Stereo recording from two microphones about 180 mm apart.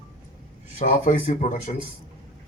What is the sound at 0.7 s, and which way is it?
Speech, 45° left (ahead or behind).